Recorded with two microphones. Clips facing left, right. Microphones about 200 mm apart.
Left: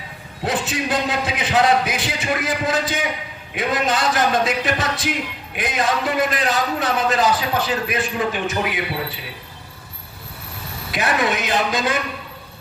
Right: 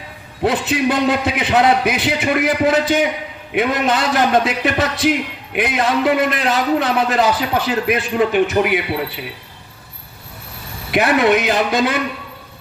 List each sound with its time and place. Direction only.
0.4 s a man's voice: 60° right (ahead or behind)
10.9 s a man's voice: 60° right (ahead or behind)